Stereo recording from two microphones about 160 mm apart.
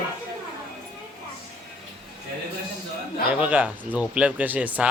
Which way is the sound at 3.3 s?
10° right (ahead or behind).